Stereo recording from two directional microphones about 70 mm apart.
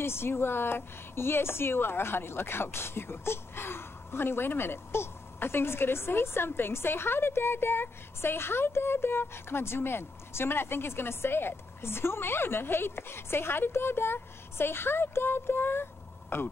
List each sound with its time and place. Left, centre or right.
0.0 s speech: left